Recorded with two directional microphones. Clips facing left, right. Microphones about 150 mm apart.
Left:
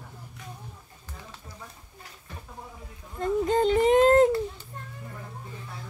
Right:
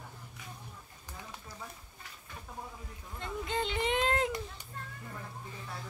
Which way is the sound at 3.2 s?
40° left (ahead or behind).